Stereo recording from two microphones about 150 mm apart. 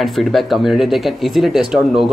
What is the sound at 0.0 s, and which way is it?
Speech, centre (ahead or behind).